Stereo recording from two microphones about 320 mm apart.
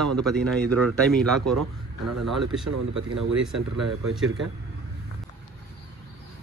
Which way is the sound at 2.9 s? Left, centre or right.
Right.